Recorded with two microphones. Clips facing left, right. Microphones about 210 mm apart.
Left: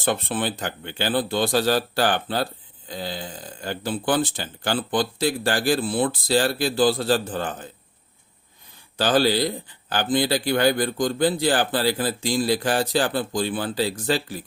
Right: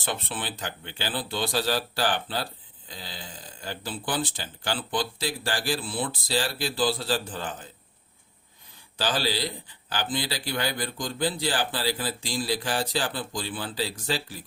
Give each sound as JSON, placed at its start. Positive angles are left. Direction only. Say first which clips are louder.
{"t": 0.0, "sound": "speech", "louder": "left 8 dB", "side_deg": 45}
{"t": 9.0, "sound": "speech", "louder": "left 8 dB", "side_deg": 50}